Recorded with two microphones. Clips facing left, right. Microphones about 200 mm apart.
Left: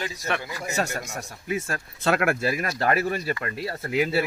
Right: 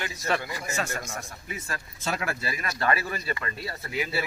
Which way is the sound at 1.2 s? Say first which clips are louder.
Left 9 dB; 40° left (ahead or behind).